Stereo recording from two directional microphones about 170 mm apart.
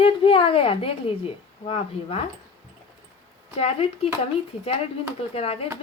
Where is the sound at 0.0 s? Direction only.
35° left (ahead or behind).